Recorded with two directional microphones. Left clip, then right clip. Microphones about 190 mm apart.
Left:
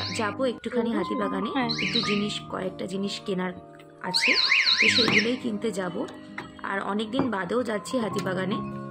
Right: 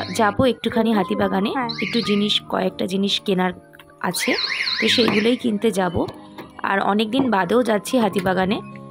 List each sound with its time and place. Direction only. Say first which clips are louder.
0.1 s a woman's voice: right 12 dB; 50° right (ahead or behind)
4.3 s speech: left 3 dB; 10° right (ahead or behind)
4.9 s a woman's voice: right 4 dB; 50° right (ahead or behind)